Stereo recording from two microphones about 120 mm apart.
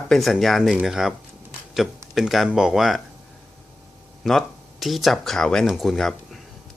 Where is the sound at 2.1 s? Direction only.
Centre (ahead or behind).